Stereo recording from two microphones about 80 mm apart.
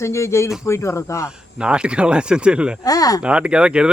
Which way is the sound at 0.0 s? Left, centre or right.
Left.